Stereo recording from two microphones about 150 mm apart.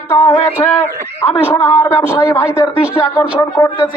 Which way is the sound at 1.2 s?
15° left (ahead or behind).